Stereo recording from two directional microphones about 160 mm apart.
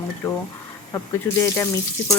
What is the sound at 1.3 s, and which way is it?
Speech, 10° left (ahead or behind).